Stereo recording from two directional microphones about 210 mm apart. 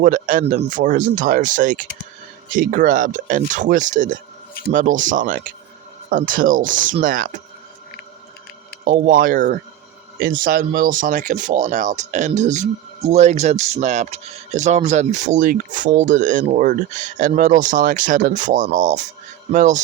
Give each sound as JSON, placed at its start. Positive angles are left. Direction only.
{"t": 0.0, "sound": "speech", "side_deg": -40}
{"t": 8.8, "sound": "speech", "side_deg": -40}